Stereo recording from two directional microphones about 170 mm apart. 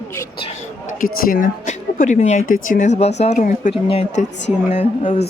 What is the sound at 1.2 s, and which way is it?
Speech, 55° left (ahead or behind).